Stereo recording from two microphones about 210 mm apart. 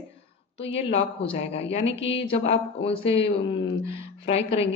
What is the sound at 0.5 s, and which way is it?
A woman's voice, 25° left (ahead or behind).